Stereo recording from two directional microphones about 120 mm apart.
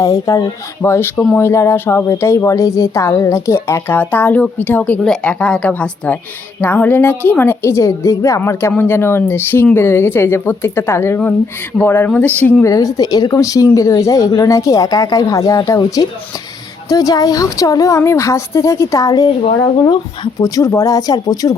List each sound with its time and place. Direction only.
0.0 s speech: 30° left (ahead or behind); by 1.4 s 10° left (ahead or behind)
1.4 s a woman's voice: 25° left (ahead or behind)
12.6 s speech: 30° left (ahead or behind)
20.6 s speech: 25° left (ahead or behind)